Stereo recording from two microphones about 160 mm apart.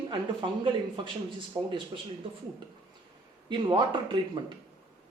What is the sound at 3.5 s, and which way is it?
Speech, 30° right (ahead or behind).